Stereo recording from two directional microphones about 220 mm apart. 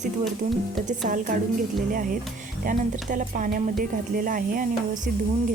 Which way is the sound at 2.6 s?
40° right (ahead or behind).